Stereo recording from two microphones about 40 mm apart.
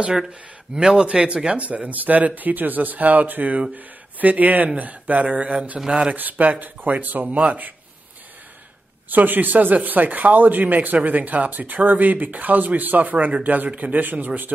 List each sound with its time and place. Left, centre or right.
0.3 s speech: centre
1.6 s speech: right
4.7 s a sound: right
5.9 s speech: right
6.1 s speech: right
9.1 s speech: right
13.7 s speech: right
14.2 s speech: right